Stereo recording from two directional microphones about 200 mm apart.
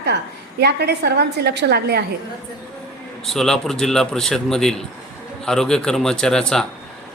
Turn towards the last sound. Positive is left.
turn(degrees=5)  # may be behind; listen again after turning